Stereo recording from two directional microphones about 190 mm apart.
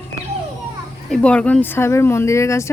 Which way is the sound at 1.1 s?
5° left (ahead or behind).